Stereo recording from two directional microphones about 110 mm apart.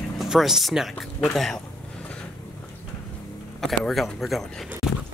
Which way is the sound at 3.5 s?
Centre (ahead or behind).